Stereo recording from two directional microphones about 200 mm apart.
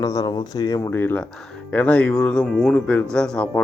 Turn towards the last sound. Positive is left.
turn(degrees=5)  # may be behind; listen again after turning